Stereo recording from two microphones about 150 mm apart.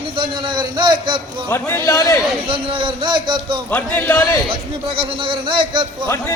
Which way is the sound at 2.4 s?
35° right (ahead or behind).